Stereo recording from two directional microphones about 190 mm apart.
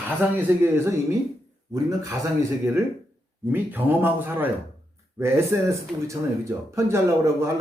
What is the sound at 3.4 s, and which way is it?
Speech, 10° right (ahead or behind).